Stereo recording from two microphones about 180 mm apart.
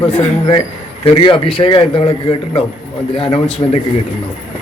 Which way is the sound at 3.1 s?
30° left (ahead or behind).